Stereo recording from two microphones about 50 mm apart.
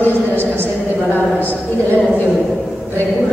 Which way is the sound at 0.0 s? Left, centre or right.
Left.